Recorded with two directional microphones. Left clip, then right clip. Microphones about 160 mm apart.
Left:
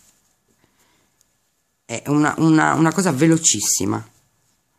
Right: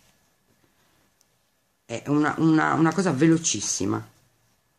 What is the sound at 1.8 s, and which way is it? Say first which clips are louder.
Speech: left 5 dB; 55° left (ahead or behind).